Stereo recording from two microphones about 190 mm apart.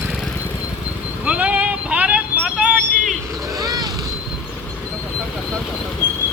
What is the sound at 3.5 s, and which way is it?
Vehicle, 20° right (ahead or behind).